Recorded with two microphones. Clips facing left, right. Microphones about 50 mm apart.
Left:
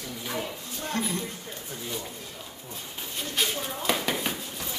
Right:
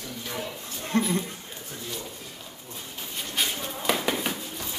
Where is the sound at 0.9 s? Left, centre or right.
Right.